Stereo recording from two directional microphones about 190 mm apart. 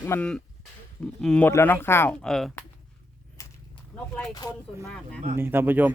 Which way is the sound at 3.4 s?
15° left (ahead or behind).